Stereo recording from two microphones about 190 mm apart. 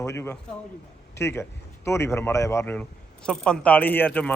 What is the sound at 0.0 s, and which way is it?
A man's voice, 15° left (ahead or behind).